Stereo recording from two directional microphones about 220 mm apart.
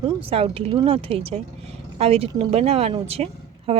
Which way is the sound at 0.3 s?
25° right (ahead or behind).